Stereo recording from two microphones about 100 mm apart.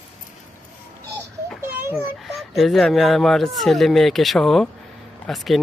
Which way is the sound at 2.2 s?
Centre (ahead or behind).